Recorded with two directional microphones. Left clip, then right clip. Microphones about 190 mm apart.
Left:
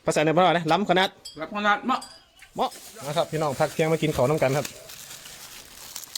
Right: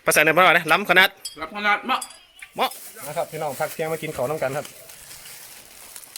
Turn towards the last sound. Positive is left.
turn(degrees=30)  # may be behind; listen again after turning